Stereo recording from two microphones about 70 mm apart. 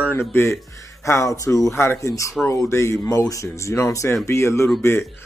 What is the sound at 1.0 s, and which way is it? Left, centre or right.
Speech, left.